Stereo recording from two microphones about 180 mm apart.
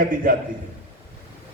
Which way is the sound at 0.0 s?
50° right (ahead or behind).